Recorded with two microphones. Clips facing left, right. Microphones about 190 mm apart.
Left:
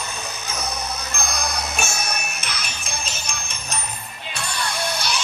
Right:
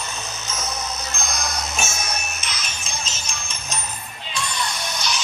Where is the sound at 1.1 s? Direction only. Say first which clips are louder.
Left 2 dB; 60° left (ahead or behind).